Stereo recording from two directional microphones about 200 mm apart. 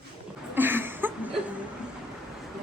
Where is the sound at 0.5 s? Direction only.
10° right (ahead or behind).